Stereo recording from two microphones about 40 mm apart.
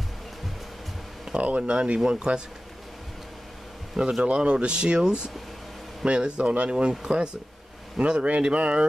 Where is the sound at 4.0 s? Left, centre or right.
Centre.